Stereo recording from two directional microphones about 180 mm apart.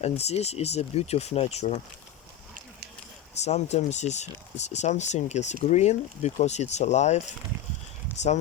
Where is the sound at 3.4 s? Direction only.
40° left (ahead or behind).